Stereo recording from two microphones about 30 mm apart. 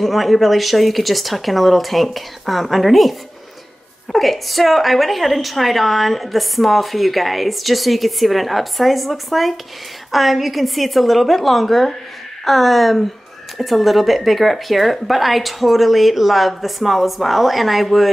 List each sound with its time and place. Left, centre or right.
0.0 s a woman's voice: centre